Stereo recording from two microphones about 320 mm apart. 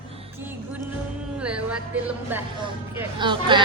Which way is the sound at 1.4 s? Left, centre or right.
Centre.